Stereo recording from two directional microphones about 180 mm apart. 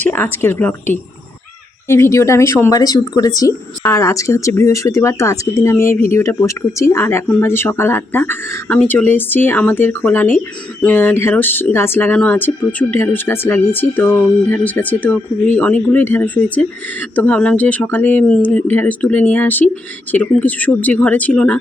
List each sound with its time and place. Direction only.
0.0 s speech: 10° left (ahead or behind)